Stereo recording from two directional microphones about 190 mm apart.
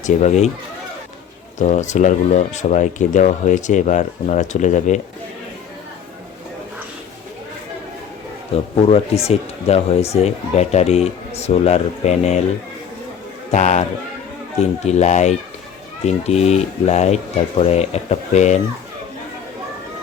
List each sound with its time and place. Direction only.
0.0 s speech: 40° left (ahead or behind)
1.5 s speech: 40° left (ahead or behind)
8.9 s speech: 30° left (ahead or behind)
13.5 s speech: 40° left (ahead or behind)